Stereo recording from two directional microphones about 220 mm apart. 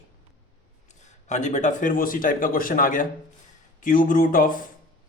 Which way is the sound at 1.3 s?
35° left (ahead or behind).